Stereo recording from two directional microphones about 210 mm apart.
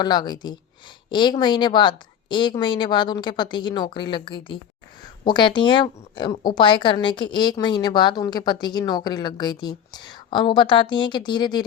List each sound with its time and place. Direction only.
0.0 s a woman's voice: 20° left (ahead or behind)